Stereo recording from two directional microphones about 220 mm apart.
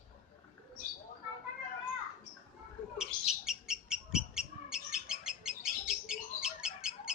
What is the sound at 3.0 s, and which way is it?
Bird, centre (ahead or behind).